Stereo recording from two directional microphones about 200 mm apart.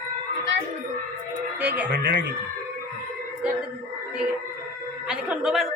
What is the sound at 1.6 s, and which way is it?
Speech, 10° right (ahead or behind).